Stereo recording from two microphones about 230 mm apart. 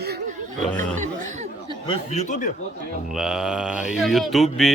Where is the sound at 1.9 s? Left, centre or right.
Left.